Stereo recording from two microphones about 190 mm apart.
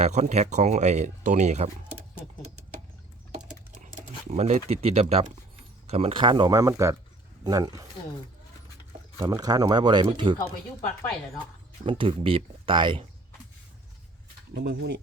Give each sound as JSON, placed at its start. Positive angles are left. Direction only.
{"t": 0.0, "sound": "speech", "side_deg": -35}
{"t": 4.3, "sound": "speech", "side_deg": -35}
{"t": 9.1, "sound": "speech", "side_deg": -20}
{"t": 11.9, "sound": "speech", "side_deg": -30}
{"t": 14.5, "sound": "speech", "side_deg": -65}